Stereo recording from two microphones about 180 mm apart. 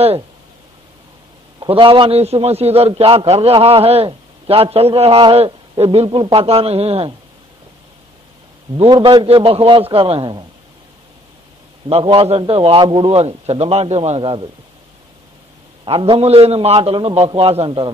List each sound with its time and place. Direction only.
1.6 s a man's voice: 30° right (ahead or behind)
8.8 s a man's voice: 25° right (ahead or behind)
11.9 s a man's voice: 30° right (ahead or behind)
15.8 s a man's voice: 25° right (ahead or behind)